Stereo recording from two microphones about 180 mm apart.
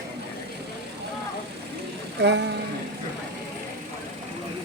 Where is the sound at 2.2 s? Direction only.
70° right (ahead or behind).